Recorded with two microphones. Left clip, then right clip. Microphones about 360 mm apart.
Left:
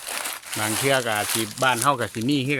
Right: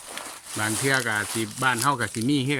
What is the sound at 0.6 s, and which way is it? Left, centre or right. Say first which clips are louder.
Speech: left 2 dB; centre.